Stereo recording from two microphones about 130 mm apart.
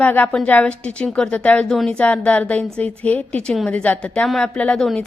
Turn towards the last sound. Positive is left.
turn(degrees=5)  # may be behind; listen again after turning